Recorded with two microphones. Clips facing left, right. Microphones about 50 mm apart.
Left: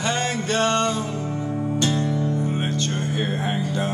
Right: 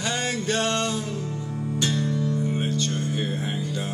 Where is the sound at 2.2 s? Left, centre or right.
Left.